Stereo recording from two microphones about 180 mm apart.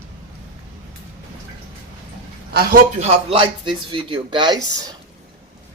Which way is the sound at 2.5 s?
55° right (ahead or behind).